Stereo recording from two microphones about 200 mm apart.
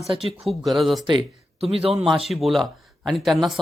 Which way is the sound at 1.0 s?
25° right (ahead or behind).